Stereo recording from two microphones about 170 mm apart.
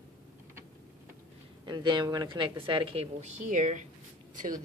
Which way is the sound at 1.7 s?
25° right (ahead or behind).